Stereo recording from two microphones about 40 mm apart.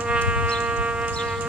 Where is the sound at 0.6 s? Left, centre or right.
Right.